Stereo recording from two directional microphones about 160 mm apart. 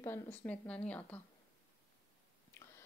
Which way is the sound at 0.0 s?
15° left (ahead or behind).